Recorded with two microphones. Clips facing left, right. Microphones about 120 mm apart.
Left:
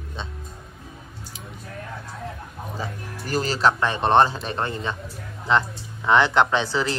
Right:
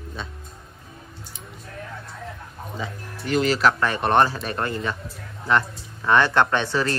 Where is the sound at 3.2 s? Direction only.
35° left (ahead or behind).